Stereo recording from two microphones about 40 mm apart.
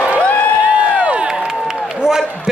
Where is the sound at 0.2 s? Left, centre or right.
Left.